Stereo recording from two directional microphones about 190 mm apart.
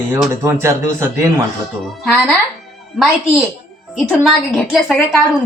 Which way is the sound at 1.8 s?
Centre (ahead or behind).